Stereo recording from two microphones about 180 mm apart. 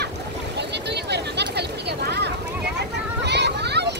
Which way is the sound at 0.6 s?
70° right (ahead or behind).